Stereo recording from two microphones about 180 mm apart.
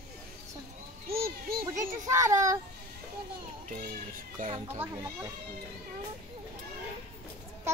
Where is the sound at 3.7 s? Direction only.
45° right (ahead or behind).